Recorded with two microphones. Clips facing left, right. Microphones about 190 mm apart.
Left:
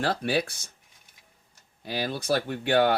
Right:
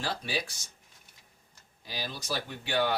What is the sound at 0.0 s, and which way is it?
Speech, 55° left (ahead or behind).